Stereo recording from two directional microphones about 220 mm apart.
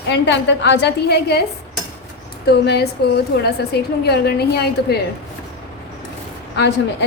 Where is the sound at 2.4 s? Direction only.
50° left (ahead or behind).